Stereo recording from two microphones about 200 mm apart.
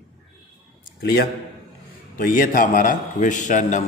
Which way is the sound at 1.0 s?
55° left (ahead or behind).